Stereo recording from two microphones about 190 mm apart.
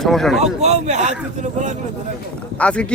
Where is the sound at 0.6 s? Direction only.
35° right (ahead or behind).